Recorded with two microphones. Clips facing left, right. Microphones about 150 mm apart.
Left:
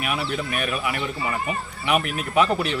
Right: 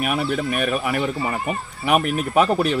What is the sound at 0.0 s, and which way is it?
Speech, 45° right (ahead or behind).